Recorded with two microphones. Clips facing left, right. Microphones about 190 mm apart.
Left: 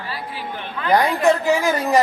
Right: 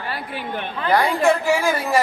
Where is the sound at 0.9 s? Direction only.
20° left (ahead or behind).